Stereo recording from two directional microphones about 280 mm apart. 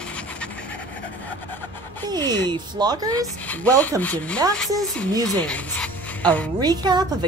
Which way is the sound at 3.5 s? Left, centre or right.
Centre.